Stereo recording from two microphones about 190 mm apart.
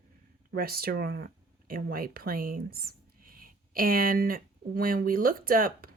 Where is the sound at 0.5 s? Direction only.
50° right (ahead or behind).